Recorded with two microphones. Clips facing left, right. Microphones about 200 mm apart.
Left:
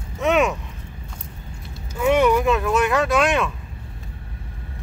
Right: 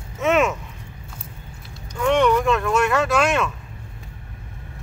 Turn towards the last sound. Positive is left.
turn(degrees=0)  # may be behind; listen again after turning